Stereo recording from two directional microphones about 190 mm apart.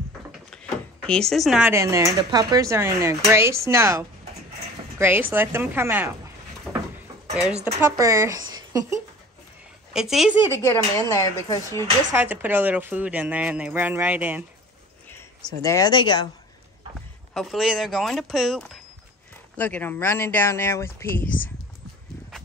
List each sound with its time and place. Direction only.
1.0 s speech: 5° left (ahead or behind)
1.7 s speech: 15° right (ahead or behind)
6.7 s a sound: 10° right (ahead or behind)
7.6 s speech: 15° right (ahead or behind)
9.9 s speech: centre (ahead or behind)
10.6 s speech: 15° left (ahead or behind)
12.1 s speech: 10° right (ahead or behind)
15.4 s speech: 20° left (ahead or behind)
17.3 s speech: centre (ahead or behind)